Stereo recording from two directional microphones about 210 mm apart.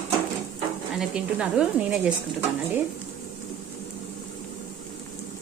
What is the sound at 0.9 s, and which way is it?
A woman's voice, 5° right (ahead or behind).